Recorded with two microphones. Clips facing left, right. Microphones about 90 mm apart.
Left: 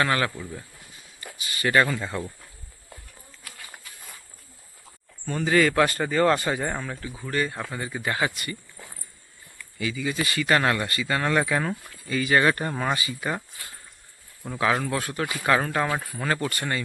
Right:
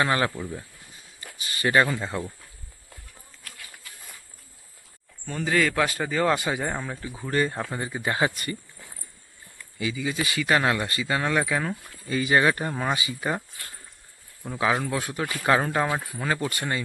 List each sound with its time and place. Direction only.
0.0 s speech: 20° right (ahead or behind)
1.4 s speech: 30° right (ahead or behind); by 2.3 s 10° right (ahead or behind)
5.2 s speech: centre (ahead or behind)
7.3 s speech: 30° right (ahead or behind)
8.3 s speech: 40° right (ahead or behind)
9.7 s speech: 15° right (ahead or behind); by 11.9 s 5° left (ahead or behind)
11.9 s speech: 25° right (ahead or behind)
12.4 s speech: 10° right (ahead or behind)
14.6 s speech: 10° right (ahead or behind)
15.4 s speech: 20° right (ahead or behind)
16.0 s speech: 5° right (ahead or behind)